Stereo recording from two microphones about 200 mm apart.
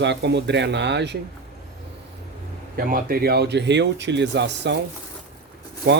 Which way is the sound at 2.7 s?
45° right (ahead or behind).